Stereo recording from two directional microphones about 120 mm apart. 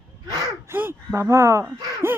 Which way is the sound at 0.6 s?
20° right (ahead or behind).